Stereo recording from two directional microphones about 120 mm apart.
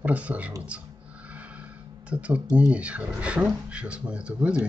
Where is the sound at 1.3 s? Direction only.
10° right (ahead or behind).